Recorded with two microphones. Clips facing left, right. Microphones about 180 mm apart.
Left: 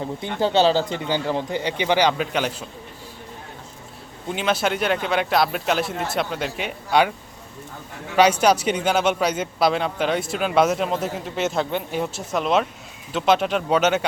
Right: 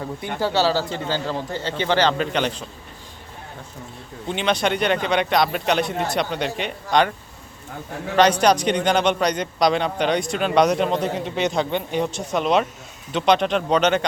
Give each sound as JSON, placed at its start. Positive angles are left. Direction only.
{"t": 0.0, "sound": "speech", "side_deg": 20}
{"t": 4.3, "sound": "a man's voice", "side_deg": 5}
{"t": 8.1, "sound": "a man's voice", "side_deg": 10}